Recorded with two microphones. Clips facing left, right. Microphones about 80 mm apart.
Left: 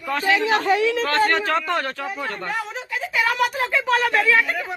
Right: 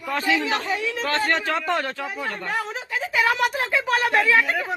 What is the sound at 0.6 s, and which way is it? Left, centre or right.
Speech, left.